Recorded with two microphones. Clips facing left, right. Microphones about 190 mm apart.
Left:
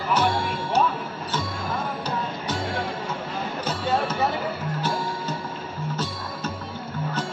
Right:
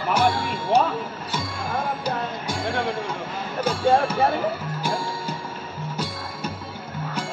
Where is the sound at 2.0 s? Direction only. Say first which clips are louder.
Right 1 dB; 10° right (ahead or behind).